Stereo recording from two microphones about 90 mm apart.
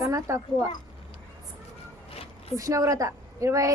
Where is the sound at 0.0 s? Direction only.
35° right (ahead or behind).